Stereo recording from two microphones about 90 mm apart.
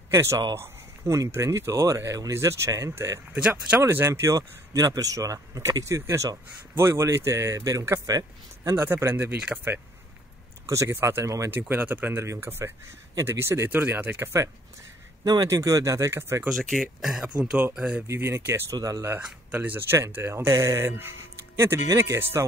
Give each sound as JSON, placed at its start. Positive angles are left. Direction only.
{"t": 0.1, "sound": "speech", "side_deg": -30}
{"t": 8.7, "sound": "speech", "side_deg": -25}
{"t": 9.5, "sound": "speech", "side_deg": -10}
{"t": 10.7, "sound": "speech", "side_deg": -30}
{"t": 11.6, "sound": "speech", "side_deg": -15}
{"t": 11.9, "sound": "speech", "side_deg": -25}
{"t": 16.4, "sound": "speech", "side_deg": 0}
{"t": 18.0, "sound": "speech", "side_deg": -30}
{"t": 19.1, "sound": "speech", "side_deg": -20}